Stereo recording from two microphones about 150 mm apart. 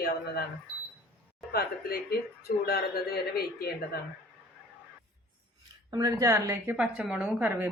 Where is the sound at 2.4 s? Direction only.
90° left.